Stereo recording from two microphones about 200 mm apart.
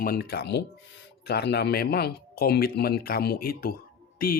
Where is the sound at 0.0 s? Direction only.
50° left (ahead or behind).